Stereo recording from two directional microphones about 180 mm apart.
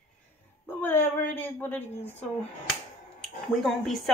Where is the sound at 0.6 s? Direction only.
10° left (ahead or behind).